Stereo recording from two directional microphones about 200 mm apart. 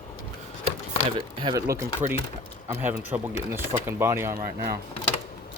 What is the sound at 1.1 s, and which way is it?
Speech, 25° right (ahead or behind).